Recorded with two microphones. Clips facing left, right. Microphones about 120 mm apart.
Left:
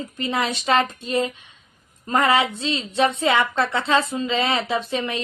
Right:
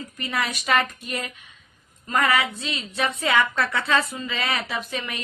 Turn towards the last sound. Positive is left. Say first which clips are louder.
# left 6 dB
turn(degrees=25)  # may be behind; listen again after turning